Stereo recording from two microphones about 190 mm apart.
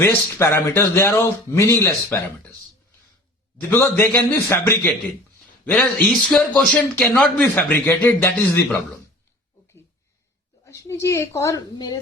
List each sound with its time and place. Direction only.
0.0 s a man's voice: 10° left (ahead or behind)
3.7 s a man's voice: 10° left (ahead or behind)
10.7 s a man's voice: 15° left (ahead or behind)